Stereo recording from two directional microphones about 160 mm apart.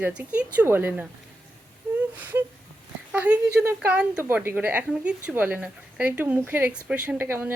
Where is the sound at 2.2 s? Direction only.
10° right (ahead or behind).